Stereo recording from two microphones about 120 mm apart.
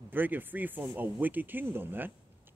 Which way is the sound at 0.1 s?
15° right (ahead or behind).